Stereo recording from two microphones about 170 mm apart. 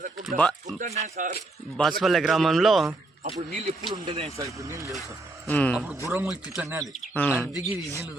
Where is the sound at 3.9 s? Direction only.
30° right (ahead or behind).